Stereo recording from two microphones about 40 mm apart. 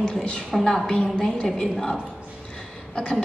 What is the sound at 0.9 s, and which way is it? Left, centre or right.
Speech, centre.